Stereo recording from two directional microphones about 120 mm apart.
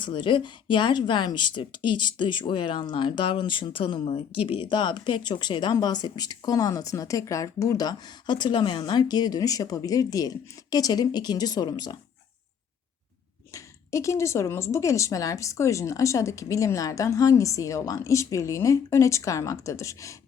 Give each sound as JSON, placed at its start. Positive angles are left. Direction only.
{"t": 0.0, "sound": "speech", "side_deg": 40}
{"t": 13.5, "sound": "speech", "side_deg": 25}